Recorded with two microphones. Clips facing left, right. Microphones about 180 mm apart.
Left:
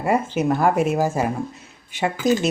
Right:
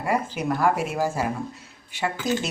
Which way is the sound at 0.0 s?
25° left (ahead or behind).